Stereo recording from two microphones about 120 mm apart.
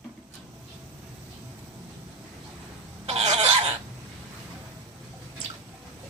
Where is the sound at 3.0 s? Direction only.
65° right (ahead or behind).